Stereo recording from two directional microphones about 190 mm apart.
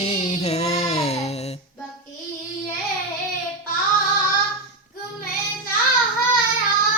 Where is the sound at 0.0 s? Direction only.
35° left (ahead or behind).